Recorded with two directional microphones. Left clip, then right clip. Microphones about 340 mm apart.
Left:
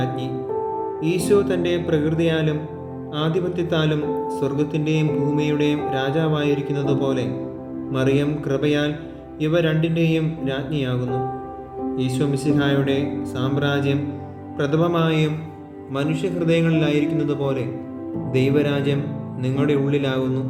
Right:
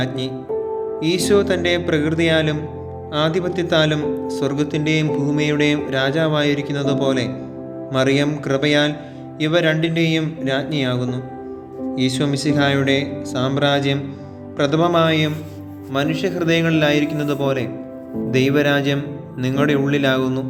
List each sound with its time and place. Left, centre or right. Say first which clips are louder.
1.0 s speech: right 2 dB; centre